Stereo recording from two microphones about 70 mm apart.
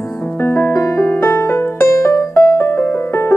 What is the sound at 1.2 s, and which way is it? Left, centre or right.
Music, left.